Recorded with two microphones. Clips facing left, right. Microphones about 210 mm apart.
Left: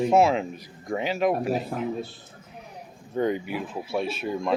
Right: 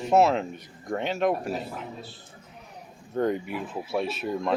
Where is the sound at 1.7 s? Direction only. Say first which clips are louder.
Left 8 dB; 50° left (ahead or behind).